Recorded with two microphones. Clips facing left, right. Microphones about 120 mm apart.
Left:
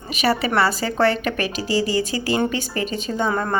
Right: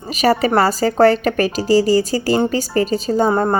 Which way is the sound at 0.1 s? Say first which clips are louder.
Right 5 dB; 40° right (ahead or behind).